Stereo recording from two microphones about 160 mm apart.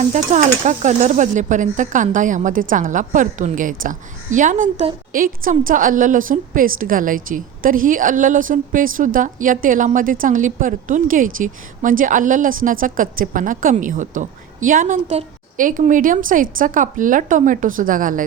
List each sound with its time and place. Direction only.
0.0 s stir: 50° right (ahead or behind)
5.1 s a woman's voice: 60° right (ahead or behind)